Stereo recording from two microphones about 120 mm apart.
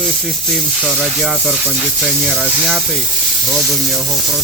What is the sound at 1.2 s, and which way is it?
Speech, centre (ahead or behind).